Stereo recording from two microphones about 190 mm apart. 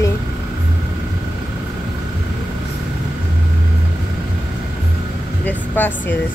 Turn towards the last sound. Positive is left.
turn(degrees=10)  # may be behind; listen again after turning